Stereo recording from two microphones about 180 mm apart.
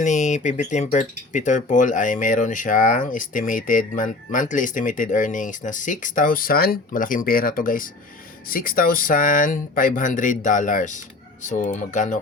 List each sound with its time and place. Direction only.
0.0 s speech: 40° left (ahead or behind)